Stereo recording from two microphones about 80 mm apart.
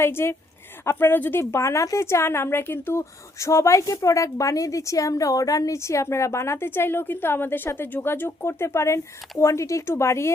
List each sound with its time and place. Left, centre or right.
0.0 s speech: left